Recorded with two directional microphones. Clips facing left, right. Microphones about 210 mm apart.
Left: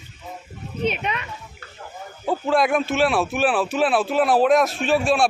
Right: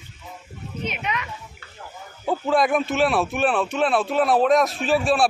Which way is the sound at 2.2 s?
Centre (ahead or behind).